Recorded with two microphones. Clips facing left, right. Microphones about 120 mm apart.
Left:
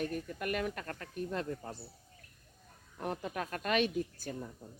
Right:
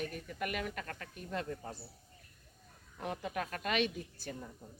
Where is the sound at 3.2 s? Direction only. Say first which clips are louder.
Even; 45° left (ahead or behind).